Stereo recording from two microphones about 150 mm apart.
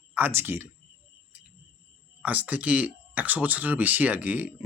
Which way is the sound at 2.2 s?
10° right (ahead or behind).